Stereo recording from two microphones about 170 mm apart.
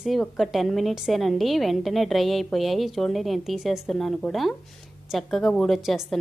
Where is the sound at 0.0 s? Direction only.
Centre (ahead or behind).